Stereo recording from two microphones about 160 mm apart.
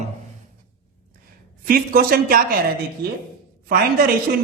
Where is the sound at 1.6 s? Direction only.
65° right (ahead or behind).